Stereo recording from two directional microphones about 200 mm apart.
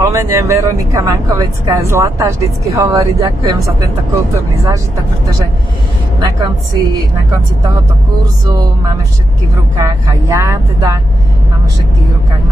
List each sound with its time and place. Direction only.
0.0 s speech: 15° right (ahead or behind)
6.2 s speech: 15° right (ahead or behind)
9.8 s speech: 15° right (ahead or behind)